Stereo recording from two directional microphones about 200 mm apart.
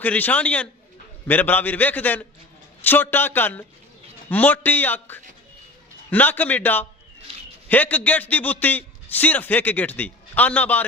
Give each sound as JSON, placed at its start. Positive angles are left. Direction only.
{"t": 0.0, "sound": "a man's voice", "side_deg": 10}